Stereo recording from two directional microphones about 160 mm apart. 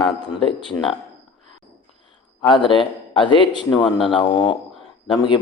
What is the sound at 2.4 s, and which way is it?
Speech, 30° left (ahead or behind).